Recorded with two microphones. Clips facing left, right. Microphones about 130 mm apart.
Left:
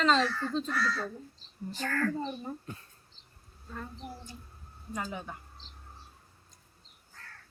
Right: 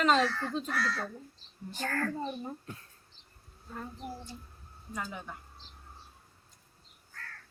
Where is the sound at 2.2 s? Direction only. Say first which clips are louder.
Even; 10° right (ahead or behind).